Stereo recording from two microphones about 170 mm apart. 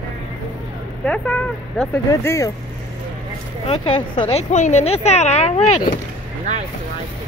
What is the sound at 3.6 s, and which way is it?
Speech, 30° left (ahead or behind).